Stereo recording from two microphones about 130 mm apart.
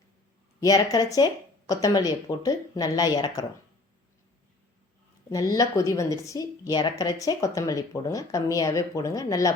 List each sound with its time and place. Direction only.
0.6 s speech: 25° left (ahead or behind)
5.3 s speech: 25° left (ahead or behind)